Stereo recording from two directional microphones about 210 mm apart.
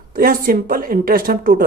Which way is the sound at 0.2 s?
45° right (ahead or behind).